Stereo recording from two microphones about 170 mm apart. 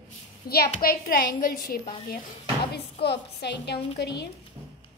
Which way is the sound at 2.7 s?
70° left (ahead or behind).